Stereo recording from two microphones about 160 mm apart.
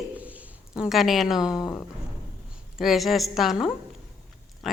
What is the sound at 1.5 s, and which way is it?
Speech, 20° left (ahead or behind).